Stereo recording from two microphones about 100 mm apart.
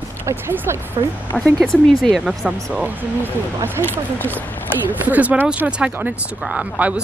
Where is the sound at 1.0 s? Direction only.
50° right (ahead or behind).